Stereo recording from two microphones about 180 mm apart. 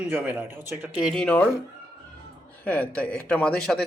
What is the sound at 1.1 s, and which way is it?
Speech, 10° left (ahead or behind).